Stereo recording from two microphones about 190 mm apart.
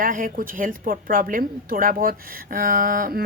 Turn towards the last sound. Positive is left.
turn(degrees=-50)  # may be behind; listen again after turning